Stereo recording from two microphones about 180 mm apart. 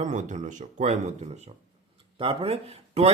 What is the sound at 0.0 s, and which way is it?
Speech, 40° right (ahead or behind).